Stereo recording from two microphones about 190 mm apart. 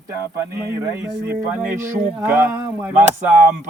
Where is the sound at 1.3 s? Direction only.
10° right (ahead or behind).